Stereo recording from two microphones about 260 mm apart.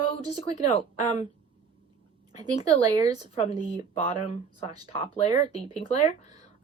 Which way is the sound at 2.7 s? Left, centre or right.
Right.